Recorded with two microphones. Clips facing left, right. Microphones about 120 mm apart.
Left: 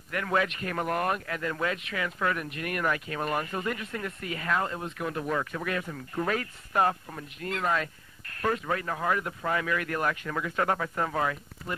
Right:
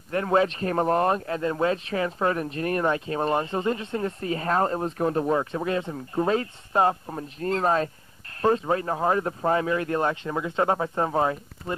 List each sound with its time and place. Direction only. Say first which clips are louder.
0.1 s speech: right 6 dB; 30° right (ahead or behind)